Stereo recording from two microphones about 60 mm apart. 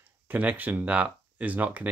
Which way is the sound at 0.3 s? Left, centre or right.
Right.